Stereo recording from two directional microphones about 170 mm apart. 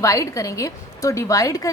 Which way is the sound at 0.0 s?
20° left (ahead or behind).